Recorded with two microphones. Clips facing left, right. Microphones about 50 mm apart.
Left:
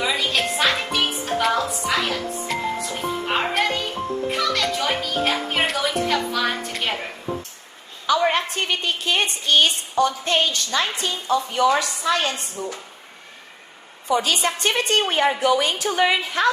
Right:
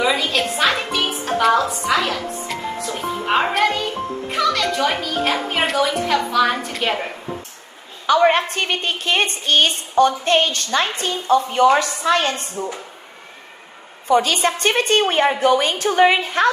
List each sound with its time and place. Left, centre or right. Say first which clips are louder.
0.0 s music: right 3 dB; centre
4.3 s a child's voice: right 5 dB; centre
8.0 s a woman's voice: right 5 dB; right
14.1 s a woman's voice: right 4 dB; right